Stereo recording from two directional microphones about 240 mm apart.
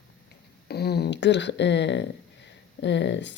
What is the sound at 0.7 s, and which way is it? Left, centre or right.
Speech, left.